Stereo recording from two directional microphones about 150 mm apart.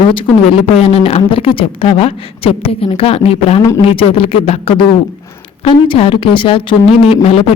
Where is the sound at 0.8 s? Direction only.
45° left (ahead or behind).